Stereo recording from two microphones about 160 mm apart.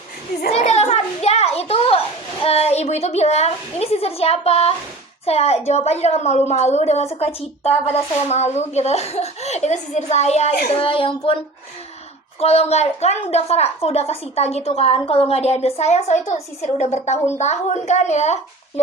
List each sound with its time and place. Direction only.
0.5 s a sound: 45° left (ahead or behind)
2.4 s a woman's voice: 40° left (ahead or behind)
10.5 s a child's voice: 85° left
10.8 s a woman's voice: 35° left (ahead or behind)
12.4 s a woman's voice: 40° left (ahead or behind)